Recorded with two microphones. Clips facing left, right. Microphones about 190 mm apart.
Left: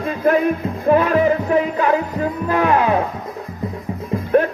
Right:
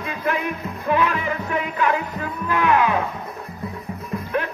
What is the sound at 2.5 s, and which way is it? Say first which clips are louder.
Speech: left 2 dB; 35° left (ahead or behind).